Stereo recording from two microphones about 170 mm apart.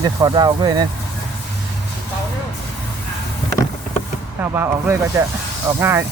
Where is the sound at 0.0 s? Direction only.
25° right (ahead or behind).